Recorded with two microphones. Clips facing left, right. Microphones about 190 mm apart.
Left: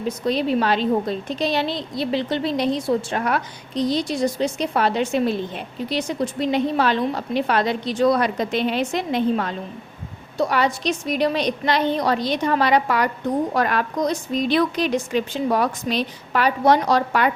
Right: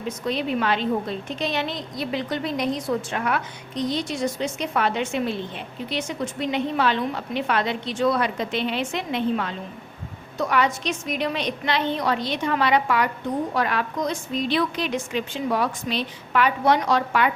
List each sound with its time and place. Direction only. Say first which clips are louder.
0.3 s a woman's voice: left 4 dB; 35° left (ahead or behind)